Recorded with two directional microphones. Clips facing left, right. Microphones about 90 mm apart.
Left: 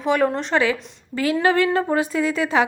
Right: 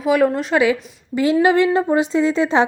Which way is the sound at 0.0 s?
5° right (ahead or behind).